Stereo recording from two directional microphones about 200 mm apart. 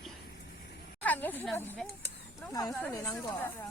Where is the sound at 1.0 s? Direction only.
10° left (ahead or behind).